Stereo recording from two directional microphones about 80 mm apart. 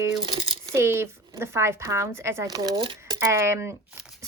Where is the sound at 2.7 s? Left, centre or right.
Right.